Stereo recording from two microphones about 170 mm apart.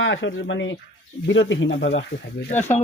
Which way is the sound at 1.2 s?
90° left.